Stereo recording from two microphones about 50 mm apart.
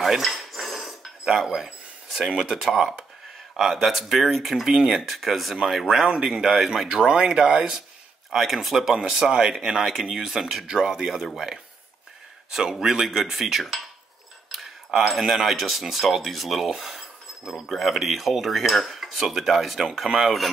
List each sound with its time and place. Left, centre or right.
0.0 s cutlery: centre
2.1 s speech: centre
3.5 s cutlery: centre
5.7 s speech: centre
7.3 s speech: right
8.3 s cutlery: centre
8.9 s speech: centre
12.7 s cutlery: centre
14.5 s speech: centre
17.6 s cutlery: centre